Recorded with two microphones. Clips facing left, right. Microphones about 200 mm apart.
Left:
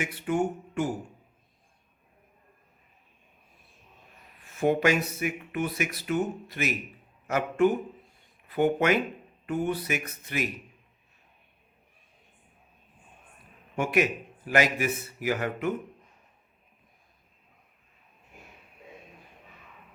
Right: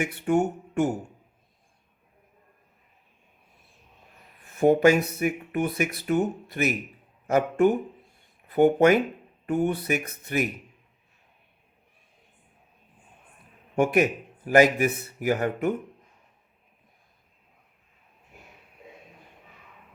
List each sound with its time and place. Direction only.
0.0 s speech: 50° right (ahead or behind)
4.6 s speech: 40° right (ahead or behind)
13.7 s a man's voice: 45° right (ahead or behind)